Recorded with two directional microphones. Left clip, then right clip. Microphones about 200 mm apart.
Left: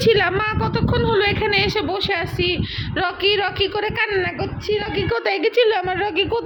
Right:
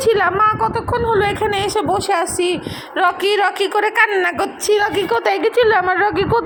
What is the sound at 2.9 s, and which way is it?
A woman's voice, 5° left (ahead or behind).